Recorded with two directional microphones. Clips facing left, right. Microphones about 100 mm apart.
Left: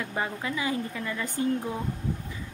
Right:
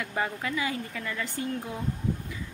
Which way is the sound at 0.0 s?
20° left (ahead or behind).